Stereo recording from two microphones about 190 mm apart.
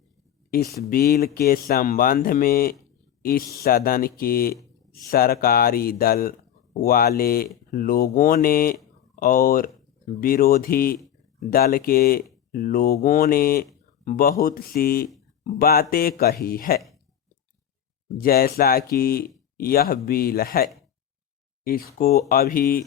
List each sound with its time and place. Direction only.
0.5 s speech: 55° left (ahead or behind)
18.2 s speech: 55° left (ahead or behind)